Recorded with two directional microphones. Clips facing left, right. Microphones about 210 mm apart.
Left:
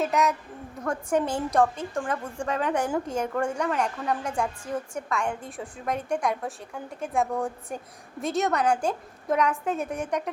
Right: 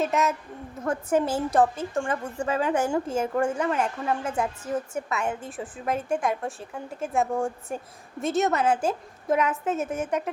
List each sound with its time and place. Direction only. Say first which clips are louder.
0.0 s a woman's voice: even; centre (ahead or behind)